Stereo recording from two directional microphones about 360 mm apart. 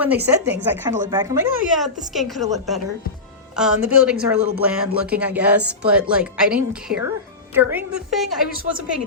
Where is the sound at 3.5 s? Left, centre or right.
Centre.